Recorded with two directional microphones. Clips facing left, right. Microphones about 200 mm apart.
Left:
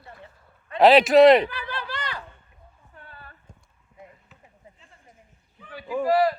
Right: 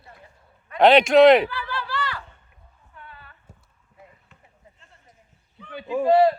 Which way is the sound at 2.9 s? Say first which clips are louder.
Right 1 dB; 40° left (ahead or behind).